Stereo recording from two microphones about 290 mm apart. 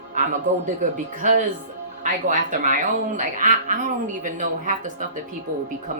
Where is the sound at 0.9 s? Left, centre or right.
Right.